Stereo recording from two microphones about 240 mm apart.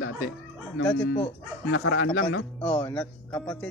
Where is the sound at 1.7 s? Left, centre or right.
Left.